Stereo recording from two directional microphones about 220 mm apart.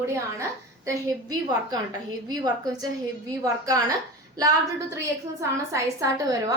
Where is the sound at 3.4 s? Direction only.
15° right (ahead or behind).